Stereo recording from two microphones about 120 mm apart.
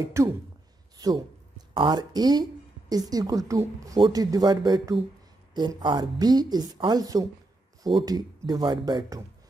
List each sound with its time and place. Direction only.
0.1 s a woman's voice: 25° right (ahead or behind)